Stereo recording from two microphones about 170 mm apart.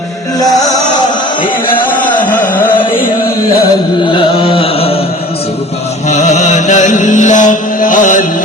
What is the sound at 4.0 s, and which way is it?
Carnatic music, 30° left (ahead or behind).